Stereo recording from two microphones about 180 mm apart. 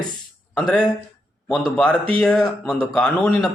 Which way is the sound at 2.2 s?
5° left (ahead or behind).